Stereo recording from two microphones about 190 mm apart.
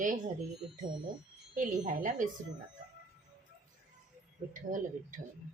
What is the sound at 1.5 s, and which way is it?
Speech, 45° right (ahead or behind).